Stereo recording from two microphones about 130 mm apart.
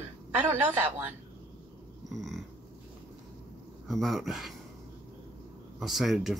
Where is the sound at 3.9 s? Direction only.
Centre (ahead or behind).